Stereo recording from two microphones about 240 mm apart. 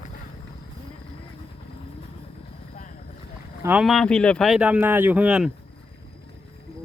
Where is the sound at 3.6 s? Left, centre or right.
Centre.